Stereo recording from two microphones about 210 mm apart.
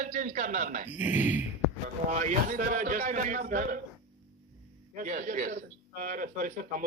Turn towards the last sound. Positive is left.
turn(degrees=-40)  # may be behind; listen again after turning